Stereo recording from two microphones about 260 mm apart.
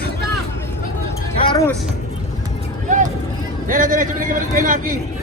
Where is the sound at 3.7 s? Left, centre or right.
Right.